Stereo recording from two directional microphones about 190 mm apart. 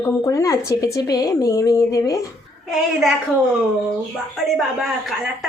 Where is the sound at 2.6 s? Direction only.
Centre (ahead or behind).